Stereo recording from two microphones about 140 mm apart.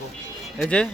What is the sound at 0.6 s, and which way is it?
Speech, 5° left (ahead or behind).